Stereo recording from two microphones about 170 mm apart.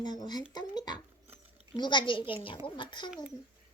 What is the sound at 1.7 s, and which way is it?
A child's voice, 25° left (ahead or behind).